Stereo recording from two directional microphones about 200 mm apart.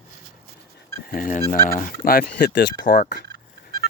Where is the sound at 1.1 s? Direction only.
40° left (ahead or behind).